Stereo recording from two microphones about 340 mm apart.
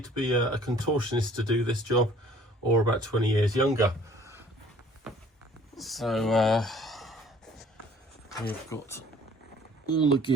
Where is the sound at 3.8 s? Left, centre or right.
Centre.